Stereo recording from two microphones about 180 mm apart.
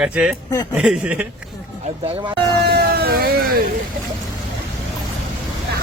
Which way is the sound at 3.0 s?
55° right (ahead or behind).